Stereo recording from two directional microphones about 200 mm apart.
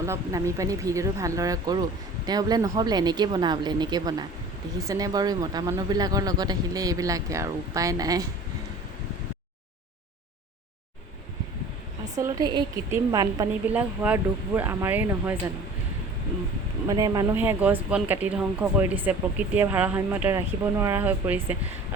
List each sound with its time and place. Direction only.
0.0 s a woman's voice: 15° right (ahead or behind)
12.2 s speech: 15° right (ahead or behind)
16.9 s speech: 20° right (ahead or behind)